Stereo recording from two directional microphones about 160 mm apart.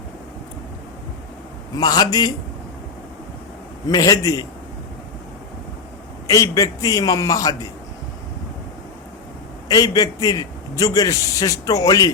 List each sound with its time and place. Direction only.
1.7 s a man's voice: 25° left (ahead or behind)
3.8 s a man's voice: 25° left (ahead or behind)
6.2 s a man's voice: 20° left (ahead or behind)
9.6 s a man's voice: 25° left (ahead or behind)